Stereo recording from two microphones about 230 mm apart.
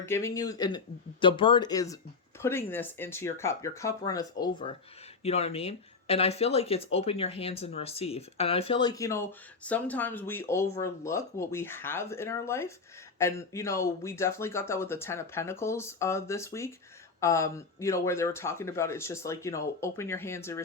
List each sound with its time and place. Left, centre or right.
0.0 s speech: centre
5.2 s speech: left; by 20.6 s centre